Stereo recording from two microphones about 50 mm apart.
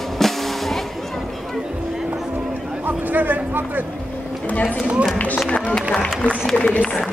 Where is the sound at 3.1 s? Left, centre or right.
Right.